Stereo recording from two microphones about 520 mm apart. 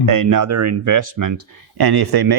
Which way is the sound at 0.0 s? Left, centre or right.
Right.